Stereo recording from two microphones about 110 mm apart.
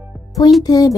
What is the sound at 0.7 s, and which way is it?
Speech, 35° left (ahead or behind).